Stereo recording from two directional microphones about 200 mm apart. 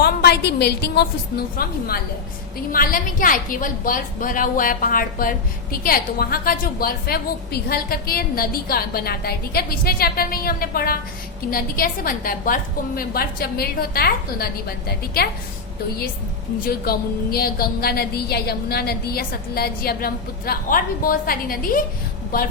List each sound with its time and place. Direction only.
0.0 s a woman's voice: 55° left (ahead or behind)
16.6 s a woman's voice: 50° left (ahead or behind)